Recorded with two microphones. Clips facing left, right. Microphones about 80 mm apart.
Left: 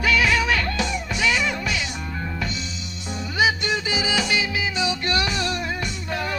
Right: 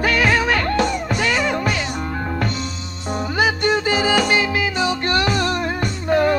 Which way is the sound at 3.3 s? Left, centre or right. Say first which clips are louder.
Right 3 dB; right.